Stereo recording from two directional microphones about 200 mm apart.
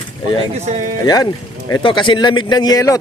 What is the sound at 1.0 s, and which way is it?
A man's voice, 20° left (ahead or behind).